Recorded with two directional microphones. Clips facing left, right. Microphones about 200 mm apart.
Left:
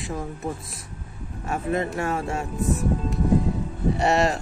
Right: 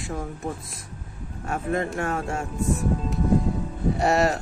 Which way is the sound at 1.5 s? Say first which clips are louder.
Left 1 dB; 5° left (ahead or behind).